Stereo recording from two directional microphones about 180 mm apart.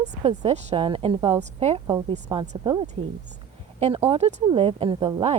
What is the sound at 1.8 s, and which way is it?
A woman's voice, 25° right (ahead or behind).